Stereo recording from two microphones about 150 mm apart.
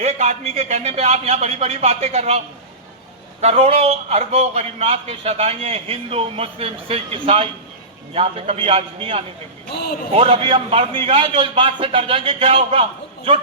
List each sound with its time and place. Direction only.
0.0 s a man's voice: 45° right (ahead or behind)
3.4 s speech: 45° right (ahead or behind)